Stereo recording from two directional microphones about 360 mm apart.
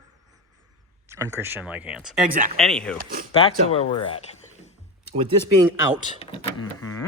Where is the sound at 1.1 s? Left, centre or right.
Centre.